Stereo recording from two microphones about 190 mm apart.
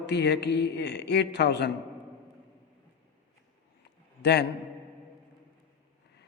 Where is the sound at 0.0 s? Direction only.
65° left (ahead or behind).